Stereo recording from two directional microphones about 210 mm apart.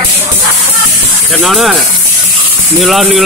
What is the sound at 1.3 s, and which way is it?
Speech, centre (ahead or behind).